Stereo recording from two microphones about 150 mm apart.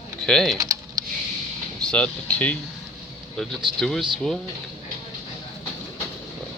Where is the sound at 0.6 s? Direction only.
25° right (ahead or behind).